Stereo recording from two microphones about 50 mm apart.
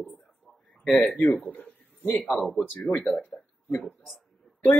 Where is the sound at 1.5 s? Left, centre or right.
Left.